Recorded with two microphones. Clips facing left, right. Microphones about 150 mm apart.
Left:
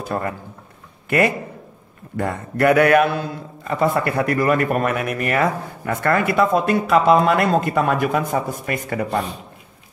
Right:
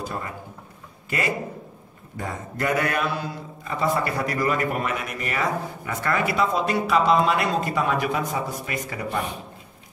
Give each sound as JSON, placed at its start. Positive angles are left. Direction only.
{"t": 0.0, "sound": "a man's voice", "side_deg": 55}
{"t": 2.1, "sound": "a man's voice", "side_deg": 65}